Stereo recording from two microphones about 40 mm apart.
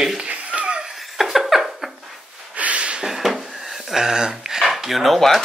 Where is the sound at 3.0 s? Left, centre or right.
Centre.